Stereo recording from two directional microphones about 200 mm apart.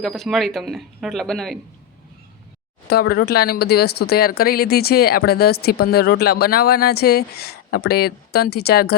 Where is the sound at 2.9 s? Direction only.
50° left (ahead or behind).